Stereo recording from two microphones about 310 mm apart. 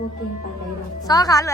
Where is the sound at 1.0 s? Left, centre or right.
Centre.